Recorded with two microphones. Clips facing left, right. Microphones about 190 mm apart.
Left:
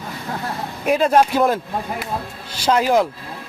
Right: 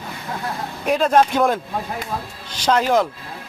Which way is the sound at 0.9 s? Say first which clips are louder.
Left 1 dB; 5° left (ahead or behind).